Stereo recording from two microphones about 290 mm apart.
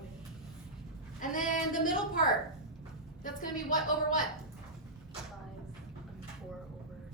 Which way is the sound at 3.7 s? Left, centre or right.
Left.